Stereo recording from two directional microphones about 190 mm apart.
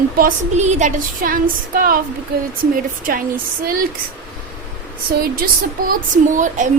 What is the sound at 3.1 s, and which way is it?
Speech, 50° right (ahead or behind).